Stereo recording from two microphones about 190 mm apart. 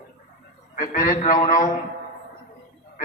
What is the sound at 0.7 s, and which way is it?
A man's voice, 40° left (ahead or behind).